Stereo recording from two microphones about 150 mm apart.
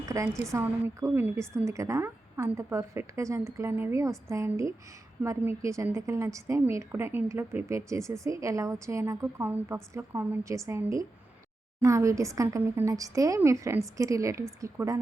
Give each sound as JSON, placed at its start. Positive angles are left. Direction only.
{"t": 0.0, "sound": "a woman's voice", "side_deg": -20}